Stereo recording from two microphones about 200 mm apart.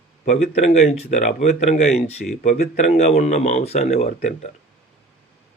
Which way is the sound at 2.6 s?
35° left (ahead or behind).